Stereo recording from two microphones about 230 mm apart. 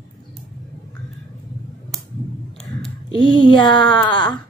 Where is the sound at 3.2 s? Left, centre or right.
Centre.